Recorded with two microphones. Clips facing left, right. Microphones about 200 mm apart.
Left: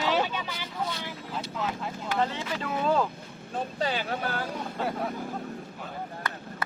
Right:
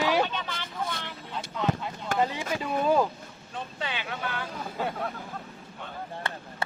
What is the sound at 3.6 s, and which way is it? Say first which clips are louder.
Speech: left 6 dB; 40° left (ahead or behind).